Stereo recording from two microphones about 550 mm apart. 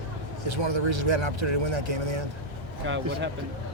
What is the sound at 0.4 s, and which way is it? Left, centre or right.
Speech, right.